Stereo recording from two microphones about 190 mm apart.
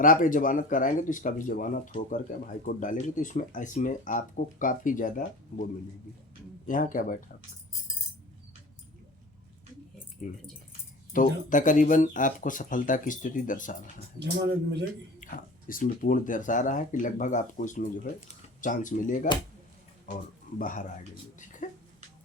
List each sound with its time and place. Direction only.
0.0 s speech: 45° left (ahead or behind)
6.7 s speech: 45° left (ahead or behind)
10.2 s speech: 45° left (ahead or behind)
14.2 s speech: 65° right (ahead or behind)
15.2 s speech: 45° left (ahead or behind)
20.6 s speech: 45° left (ahead or behind)
21.3 s a sound: 40° left (ahead or behind)